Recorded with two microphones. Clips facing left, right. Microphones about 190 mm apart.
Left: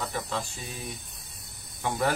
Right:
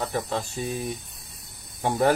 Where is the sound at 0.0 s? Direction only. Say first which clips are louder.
Right 5 dB; 40° right (ahead or behind).